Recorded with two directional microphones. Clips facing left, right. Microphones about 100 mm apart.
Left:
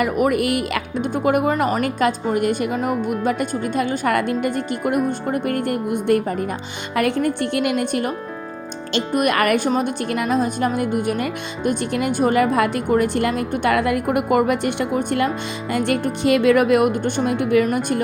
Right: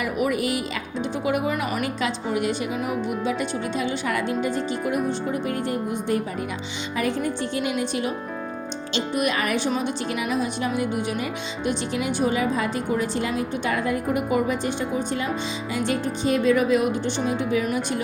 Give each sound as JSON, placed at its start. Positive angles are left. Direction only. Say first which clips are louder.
{"t": 0.0, "sound": "a woman's voice", "louder": "left 6 dB", "side_deg": 55}